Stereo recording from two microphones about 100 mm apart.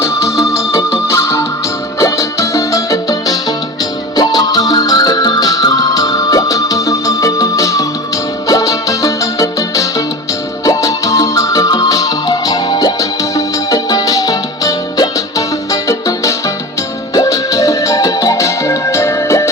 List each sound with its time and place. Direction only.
0.0 s music: 30° left (ahead or behind)